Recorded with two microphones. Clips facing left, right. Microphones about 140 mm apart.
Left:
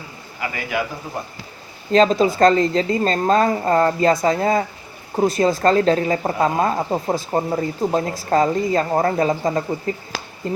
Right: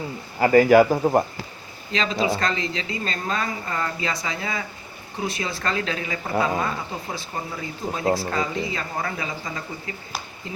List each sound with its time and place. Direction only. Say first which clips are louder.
0.3 s a man's voice: right 11 dB; 40° right (ahead or behind)
1.9 s speech: left 9 dB; 45° left (ahead or behind)
10.1 s a sound: left 3 dB; 90° left